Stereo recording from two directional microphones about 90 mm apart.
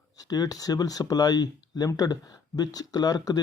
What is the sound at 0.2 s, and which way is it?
Speech, 45° left (ahead or behind).